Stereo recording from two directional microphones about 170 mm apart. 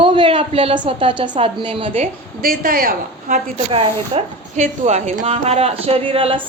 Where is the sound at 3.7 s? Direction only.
35° right (ahead or behind).